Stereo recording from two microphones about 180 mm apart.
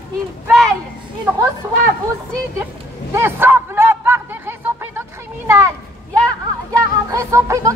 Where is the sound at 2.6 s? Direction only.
15° right (ahead or behind).